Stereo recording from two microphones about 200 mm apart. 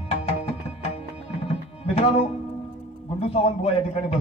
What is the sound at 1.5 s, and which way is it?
Tabla, 30° left (ahead or behind).